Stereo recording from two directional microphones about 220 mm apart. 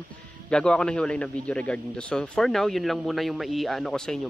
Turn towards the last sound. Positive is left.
turn(degrees=0)  # may be behind; listen again after turning